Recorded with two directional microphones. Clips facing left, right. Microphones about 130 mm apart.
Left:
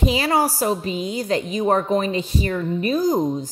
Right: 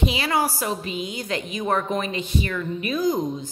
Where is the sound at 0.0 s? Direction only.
40° left (ahead or behind).